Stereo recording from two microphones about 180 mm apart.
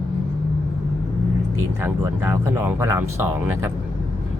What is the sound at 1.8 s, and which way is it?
Speech, 15° right (ahead or behind).